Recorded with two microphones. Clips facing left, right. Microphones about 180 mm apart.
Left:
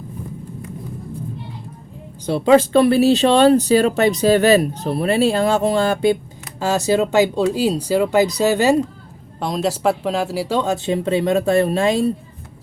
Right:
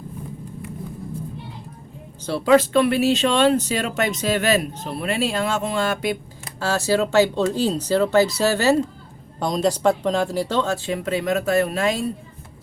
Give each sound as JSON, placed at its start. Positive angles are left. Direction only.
{"t": 2.2, "sound": "speech", "side_deg": 20}
{"t": 6.6, "sound": "speech", "side_deg": 15}
{"t": 9.4, "sound": "speech", "side_deg": 0}